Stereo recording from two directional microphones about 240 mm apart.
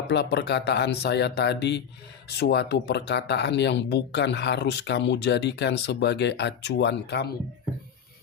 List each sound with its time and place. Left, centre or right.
0.1 s speech: left